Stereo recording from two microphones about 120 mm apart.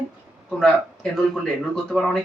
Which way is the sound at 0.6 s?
5° left (ahead or behind).